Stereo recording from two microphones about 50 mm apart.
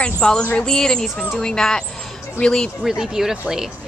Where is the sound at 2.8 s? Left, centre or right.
Centre.